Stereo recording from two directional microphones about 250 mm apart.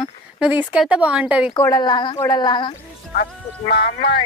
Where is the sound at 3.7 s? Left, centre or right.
Left.